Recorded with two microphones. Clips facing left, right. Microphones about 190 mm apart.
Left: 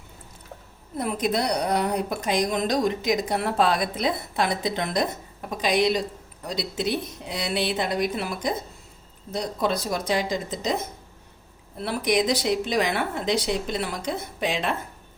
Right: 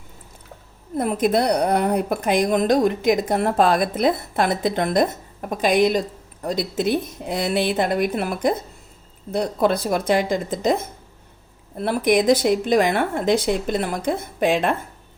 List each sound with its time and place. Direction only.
0.9 s a woman's voice: 50° right (ahead or behind)
11.8 s a woman's voice: 50° right (ahead or behind)